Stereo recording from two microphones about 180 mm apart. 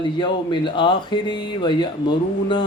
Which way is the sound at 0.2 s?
25° left (ahead or behind).